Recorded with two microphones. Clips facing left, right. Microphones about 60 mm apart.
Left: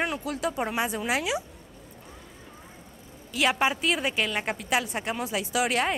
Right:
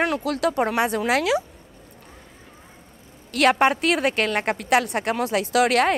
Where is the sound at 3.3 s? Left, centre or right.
Right.